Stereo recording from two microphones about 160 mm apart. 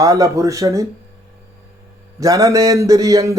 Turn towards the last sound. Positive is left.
turn(degrees=-20)  # may be behind; listen again after turning